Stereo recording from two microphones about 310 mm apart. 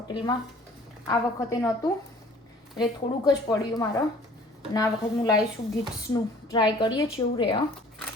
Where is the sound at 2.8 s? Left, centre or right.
Centre.